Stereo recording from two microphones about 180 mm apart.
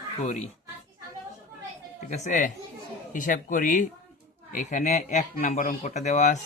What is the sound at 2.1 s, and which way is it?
A man's voice, 40° left (ahead or behind).